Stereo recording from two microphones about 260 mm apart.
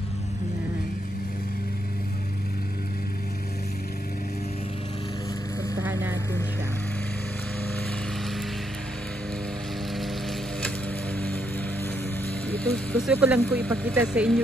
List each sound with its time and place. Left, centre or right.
5.8 s vehicle: centre
12.4 s music: centre
13.1 s speech: centre